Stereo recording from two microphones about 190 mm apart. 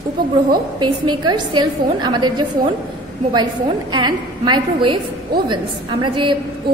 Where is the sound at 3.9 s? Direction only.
25° right (ahead or behind).